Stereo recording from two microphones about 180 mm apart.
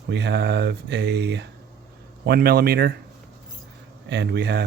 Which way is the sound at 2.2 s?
60° right (ahead or behind).